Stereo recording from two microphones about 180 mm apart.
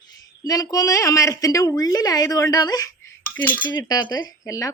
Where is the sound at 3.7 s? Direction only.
25° left (ahead or behind).